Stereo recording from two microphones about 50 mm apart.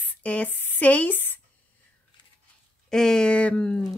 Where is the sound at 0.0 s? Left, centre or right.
Left.